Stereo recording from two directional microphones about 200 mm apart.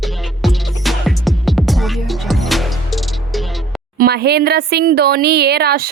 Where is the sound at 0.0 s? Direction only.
Centre (ahead or behind).